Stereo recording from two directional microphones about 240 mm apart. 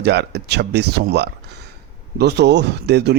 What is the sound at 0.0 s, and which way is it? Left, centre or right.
Speech, right.